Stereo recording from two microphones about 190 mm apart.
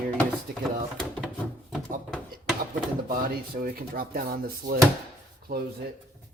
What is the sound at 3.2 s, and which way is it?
Speech, 50° right (ahead or behind).